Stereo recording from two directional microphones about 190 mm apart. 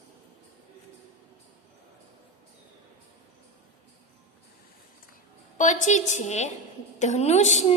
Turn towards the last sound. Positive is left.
turn(degrees=40)  # may be behind; listen again after turning